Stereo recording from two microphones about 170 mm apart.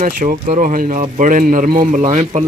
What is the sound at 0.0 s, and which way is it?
A man's voice, 50° right (ahead or behind).